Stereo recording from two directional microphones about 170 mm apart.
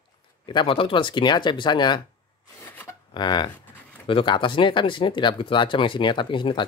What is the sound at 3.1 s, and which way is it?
Speech, 25° left (ahead or behind).